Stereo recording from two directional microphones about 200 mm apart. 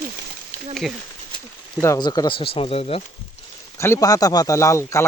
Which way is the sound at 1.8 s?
15° left (ahead or behind).